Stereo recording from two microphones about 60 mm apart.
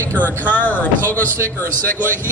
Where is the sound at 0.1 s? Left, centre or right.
Left.